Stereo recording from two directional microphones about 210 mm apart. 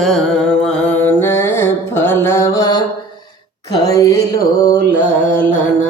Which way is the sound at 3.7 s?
15° left (ahead or behind).